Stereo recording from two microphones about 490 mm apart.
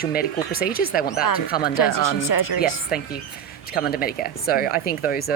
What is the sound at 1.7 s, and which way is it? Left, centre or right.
Speech, left.